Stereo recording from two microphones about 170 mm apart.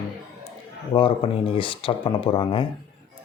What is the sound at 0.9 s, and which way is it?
Speech, 30° left (ahead or behind).